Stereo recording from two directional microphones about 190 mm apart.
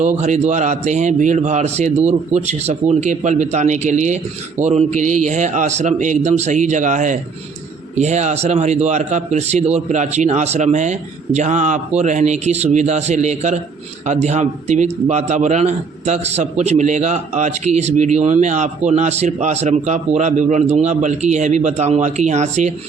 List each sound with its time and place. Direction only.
0.0 s speech: 35° right (ahead or behind)